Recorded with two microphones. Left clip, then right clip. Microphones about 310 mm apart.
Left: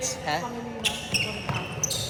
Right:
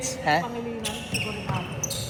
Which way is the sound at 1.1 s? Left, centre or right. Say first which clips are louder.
Left 2 dB; centre.